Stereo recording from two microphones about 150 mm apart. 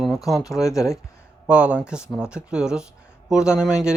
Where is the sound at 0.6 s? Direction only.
20° left (ahead or behind).